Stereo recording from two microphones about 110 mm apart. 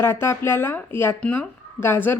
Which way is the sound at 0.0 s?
20° left (ahead or behind).